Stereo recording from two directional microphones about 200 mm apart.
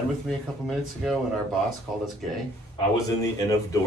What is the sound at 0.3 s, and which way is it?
Speech, centre (ahead or behind).